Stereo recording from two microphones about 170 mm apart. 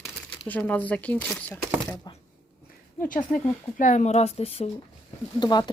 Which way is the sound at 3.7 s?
45° left (ahead or behind).